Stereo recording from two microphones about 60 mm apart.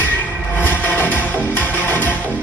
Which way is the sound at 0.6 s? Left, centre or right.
Left.